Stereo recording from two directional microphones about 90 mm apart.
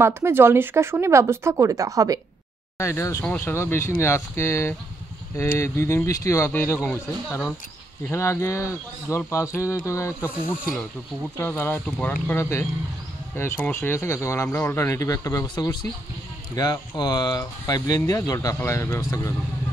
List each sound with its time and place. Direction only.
0.0 s speech: 25° right (ahead or behind)
2.8 s speech: 30° left (ahead or behind)
8.1 s speech: 30° left (ahead or behind)
11.3 s speech: 25° left (ahead or behind)
12.4 s speech: 30° left (ahead or behind)
15.4 s speech: 55° left (ahead or behind); by 18.9 s 30° left (ahead or behind)
18.9 s speech: 40° left (ahead or behind)